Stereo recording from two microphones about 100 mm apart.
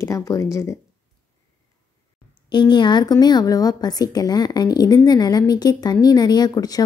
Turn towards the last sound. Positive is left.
turn(degrees=40)  # may be behind; listen again after turning